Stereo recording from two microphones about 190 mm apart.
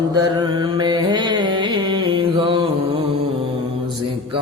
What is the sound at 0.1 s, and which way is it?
Carnatic music, 20° right (ahead or behind).